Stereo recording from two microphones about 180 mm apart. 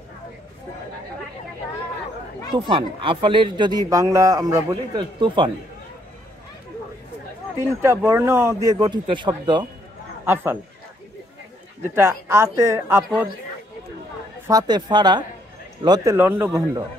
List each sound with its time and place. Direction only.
2.5 s speech: 30° right (ahead or behind)
7.5 s speech: 15° right (ahead or behind)
10.2 s speech: 10° right (ahead or behind)
11.8 s speech: 15° right (ahead or behind)
14.5 s speech: 25° right (ahead or behind)